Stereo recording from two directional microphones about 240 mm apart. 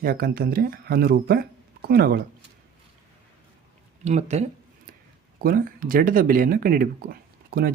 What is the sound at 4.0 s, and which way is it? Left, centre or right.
Speech, right.